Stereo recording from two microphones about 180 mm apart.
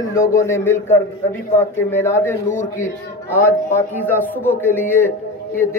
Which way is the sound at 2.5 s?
40° left (ahead or behind).